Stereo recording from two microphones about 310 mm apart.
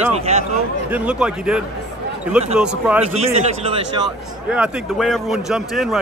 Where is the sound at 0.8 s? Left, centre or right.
Centre.